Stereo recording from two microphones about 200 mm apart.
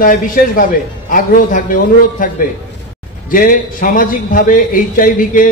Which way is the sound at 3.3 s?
45° left (ahead or behind).